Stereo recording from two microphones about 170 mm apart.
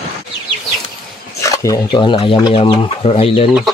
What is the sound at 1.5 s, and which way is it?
Speech, 25° left (ahead or behind).